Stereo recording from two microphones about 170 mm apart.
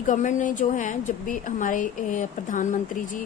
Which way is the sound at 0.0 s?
45° left (ahead or behind).